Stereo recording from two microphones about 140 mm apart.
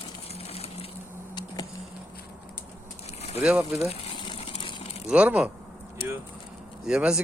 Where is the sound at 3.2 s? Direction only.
50° left (ahead or behind).